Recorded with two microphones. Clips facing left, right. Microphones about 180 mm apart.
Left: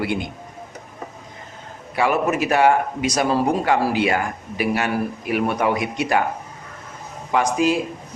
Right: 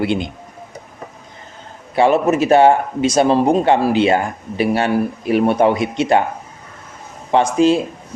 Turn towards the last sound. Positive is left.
turn(degrees=-30)  # may be behind; listen again after turning